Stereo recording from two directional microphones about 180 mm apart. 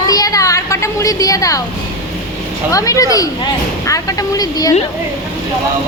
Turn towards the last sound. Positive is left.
turn(degrees=20)  # may be behind; listen again after turning